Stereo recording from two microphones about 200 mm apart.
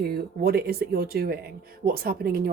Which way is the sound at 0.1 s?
50° right (ahead or behind).